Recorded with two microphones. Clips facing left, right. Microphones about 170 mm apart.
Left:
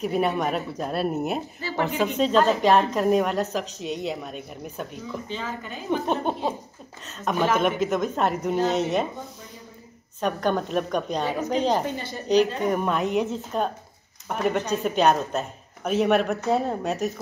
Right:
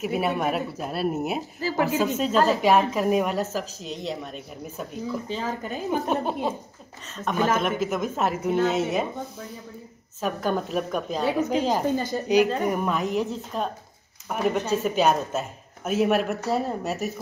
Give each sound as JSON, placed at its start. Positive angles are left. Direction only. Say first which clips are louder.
{"t": 0.0, "sound": "speech", "louder": "left 1 dB", "side_deg": -5}
{"t": 1.6, "sound": "a woman's voice", "louder": "right 4 dB", "side_deg": -40}
{"t": 2.1, "sound": "speech", "louder": "left 4 dB", "side_deg": -5}
{"t": 5.3, "sound": "a woman's voice", "louder": "right 3 dB", "side_deg": -40}
{"t": 5.9, "sound": "speech", "louder": "left 1 dB", "side_deg": 0}
{"t": 7.5, "sound": "speech", "louder": "left 2 dB", "side_deg": 0}
{"t": 10.2, "sound": "speech", "louder": "left 2 dB", "side_deg": -5}
{"t": 11.9, "sound": "a woman's voice", "louder": "right 7 dB", "side_deg": -40}
{"t": 12.6, "sound": "speech", "louder": "left 1 dB", "side_deg": 0}